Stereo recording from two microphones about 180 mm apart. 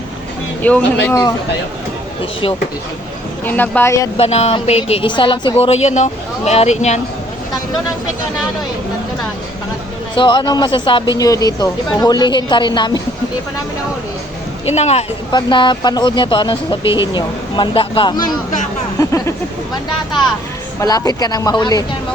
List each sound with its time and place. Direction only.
0.6 s speech: 10° left (ahead or behind)
3.4 s speech: 10° left (ahead or behind)
4.2 s a woman's voice: 35° left (ahead or behind)
10.2 s speech: 25° left (ahead or behind)
14.6 s speech: 35° left (ahead or behind)
15.3 s speech: 25° left (ahead or behind)
20.8 s speech: 20° left (ahead or behind)